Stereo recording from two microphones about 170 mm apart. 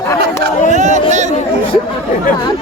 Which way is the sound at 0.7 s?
45° right (ahead or behind).